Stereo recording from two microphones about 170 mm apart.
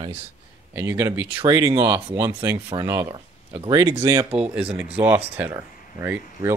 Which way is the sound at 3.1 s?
30° right (ahead or behind).